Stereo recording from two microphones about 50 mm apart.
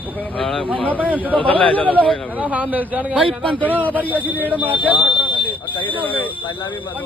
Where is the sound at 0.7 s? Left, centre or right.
Left.